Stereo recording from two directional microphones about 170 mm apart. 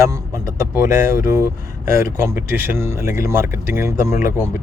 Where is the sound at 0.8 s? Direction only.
15° right (ahead or behind).